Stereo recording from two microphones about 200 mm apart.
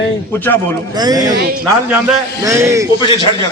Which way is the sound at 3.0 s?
25° left (ahead or behind).